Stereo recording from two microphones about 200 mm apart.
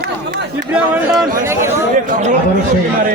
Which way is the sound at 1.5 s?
15° right (ahead or behind).